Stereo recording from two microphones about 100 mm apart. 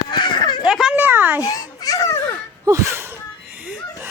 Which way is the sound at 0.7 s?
5° right (ahead or behind).